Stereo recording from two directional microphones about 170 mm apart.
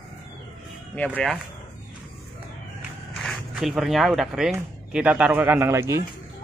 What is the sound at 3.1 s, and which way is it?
A man's voice, centre (ahead or behind).